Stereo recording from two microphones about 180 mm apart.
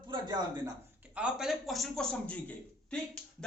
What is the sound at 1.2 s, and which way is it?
A man's voice, centre (ahead or behind).